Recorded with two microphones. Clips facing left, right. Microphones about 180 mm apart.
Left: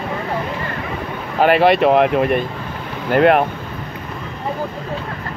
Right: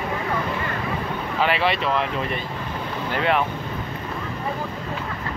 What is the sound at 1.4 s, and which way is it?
Speech, 50° left (ahead or behind).